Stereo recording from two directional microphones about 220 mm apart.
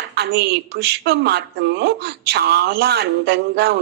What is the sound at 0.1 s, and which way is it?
A woman's voice, 45° right (ahead or behind).